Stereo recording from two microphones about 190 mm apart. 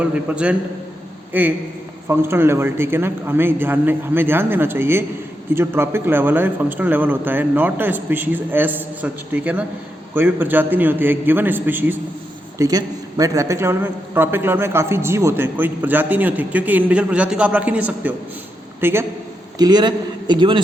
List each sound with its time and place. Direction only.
0.0 s a man's voice: 5° right (ahead or behind); by 20.6 s 25° right (ahead or behind)